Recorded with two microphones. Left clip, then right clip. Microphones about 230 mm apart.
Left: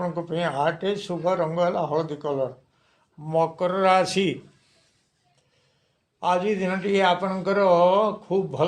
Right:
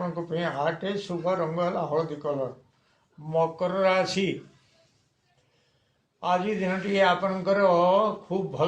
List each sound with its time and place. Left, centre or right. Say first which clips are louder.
0.2 s a man's voice: left 3 dB; left
6.1 s a man's voice: left 3 dB; left